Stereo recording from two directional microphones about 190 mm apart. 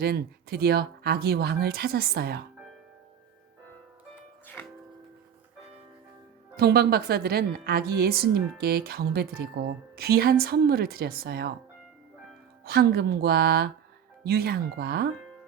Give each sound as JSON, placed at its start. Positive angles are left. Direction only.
{"t": 0.0, "sound": "a woman's voice", "side_deg": -55}
{"t": 4.6, "sound": "music", "side_deg": 10}
{"t": 6.6, "sound": "a woman's voice", "side_deg": -55}
{"t": 12.6, "sound": "a woman's voice", "side_deg": -55}